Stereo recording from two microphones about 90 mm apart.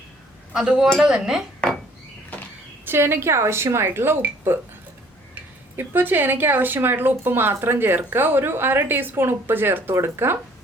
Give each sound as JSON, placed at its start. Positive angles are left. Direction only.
{"t": 0.5, "sound": "speech", "side_deg": -5}
{"t": 2.8, "sound": "speech", "side_deg": -25}